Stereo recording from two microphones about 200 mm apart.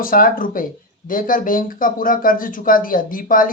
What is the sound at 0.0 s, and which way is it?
Speech, 45° left (ahead or behind).